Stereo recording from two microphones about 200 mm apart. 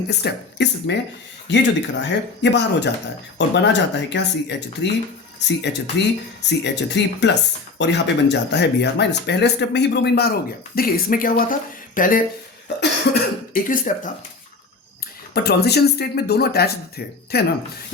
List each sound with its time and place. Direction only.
0.1 s speech: 55° left (ahead or behind)
13.1 s speech: 60° left (ahead or behind)
13.5 s speech: 40° left (ahead or behind)
15.4 s speech: 55° left (ahead or behind)